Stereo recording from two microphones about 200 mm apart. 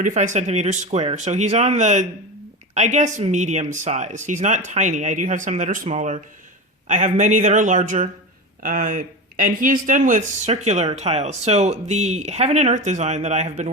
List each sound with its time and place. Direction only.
0.0 s speech: 40° right (ahead or behind)